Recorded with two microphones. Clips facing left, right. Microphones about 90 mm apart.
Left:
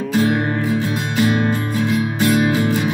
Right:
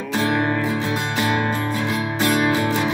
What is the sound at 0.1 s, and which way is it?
Music, 30° right (ahead or behind).